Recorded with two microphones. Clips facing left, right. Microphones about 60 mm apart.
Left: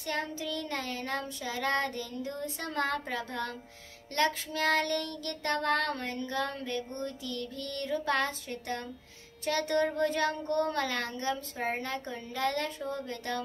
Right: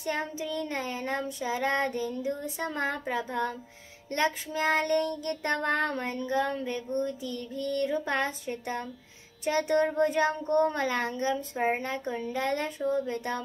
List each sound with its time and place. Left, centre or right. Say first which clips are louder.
0.0 s a child's voice: right 2 dB; right
2.2 s child singing: right 5 dB; centre
4.1 s a child's voice: right 1 dB; centre